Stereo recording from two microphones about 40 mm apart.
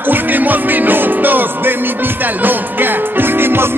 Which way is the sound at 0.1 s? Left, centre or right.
Right.